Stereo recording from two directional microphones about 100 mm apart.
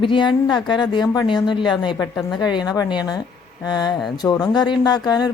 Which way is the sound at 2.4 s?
45° left (ahead or behind).